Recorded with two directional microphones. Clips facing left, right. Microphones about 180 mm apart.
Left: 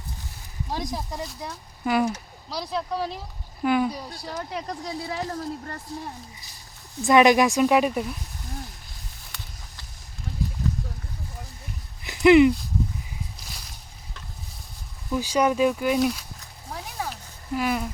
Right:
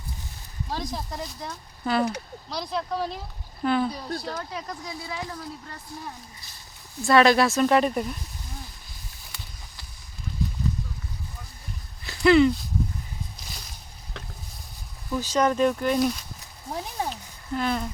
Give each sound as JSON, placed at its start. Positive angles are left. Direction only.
{"t": 0.7, "sound": "speech", "side_deg": 15}
{"t": 4.6, "sound": "speech", "side_deg": 35}
{"t": 7.0, "sound": "speech", "side_deg": 15}
{"t": 10.3, "sound": "a sound", "side_deg": 70}
{"t": 12.0, "sound": "a sound", "side_deg": 20}
{"t": 15.1, "sound": "speech", "side_deg": 10}
{"t": 17.5, "sound": "speech", "side_deg": 10}